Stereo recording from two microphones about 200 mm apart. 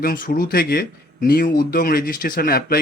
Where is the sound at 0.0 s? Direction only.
45° left (ahead or behind).